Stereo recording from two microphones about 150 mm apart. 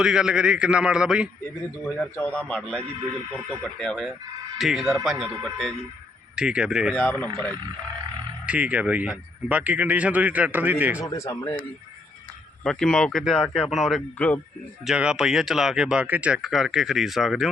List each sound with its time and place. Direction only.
0.0 s speech: 5° right (ahead or behind)
2.1 s speech: 10° left (ahead or behind); by 6.9 s 5° right (ahead or behind)
6.9 s speech: 10° left (ahead or behind)
8.4 s speech: 10° right (ahead or behind)
11.0 s speech: 20° left (ahead or behind)
12.6 s speech: 5° left (ahead or behind)
14.8 s speech: 5° right (ahead or behind)